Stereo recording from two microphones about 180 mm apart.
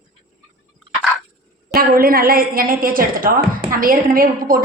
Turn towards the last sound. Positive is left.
turn(degrees=-50)  # may be behind; listen again after turning